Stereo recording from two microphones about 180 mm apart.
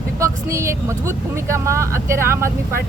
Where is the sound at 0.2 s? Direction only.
15° right (ahead or behind).